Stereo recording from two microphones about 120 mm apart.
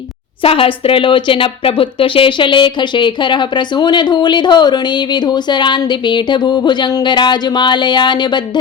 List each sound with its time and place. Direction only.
0.4 s speech: 50° left (ahead or behind)